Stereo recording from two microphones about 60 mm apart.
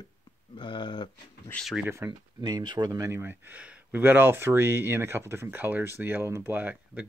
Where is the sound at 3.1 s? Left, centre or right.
Right.